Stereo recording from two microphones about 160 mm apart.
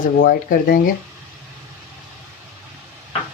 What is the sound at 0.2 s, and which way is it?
Speech, 65° left (ahead or behind).